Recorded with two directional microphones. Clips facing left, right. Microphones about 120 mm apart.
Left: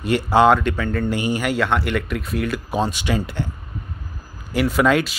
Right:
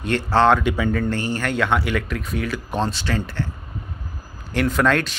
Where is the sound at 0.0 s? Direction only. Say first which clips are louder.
Left 2 dB; 10° left (ahead or behind).